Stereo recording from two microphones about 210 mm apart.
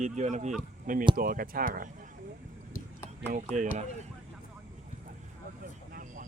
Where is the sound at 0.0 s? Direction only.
35° right (ahead or behind).